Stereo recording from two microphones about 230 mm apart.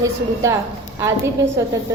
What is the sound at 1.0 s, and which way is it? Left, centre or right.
Speech, centre.